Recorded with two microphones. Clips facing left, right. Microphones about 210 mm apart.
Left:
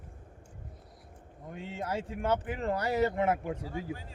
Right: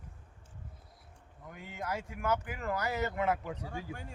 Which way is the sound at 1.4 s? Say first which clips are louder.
Left 3 dB; 25° left (ahead or behind).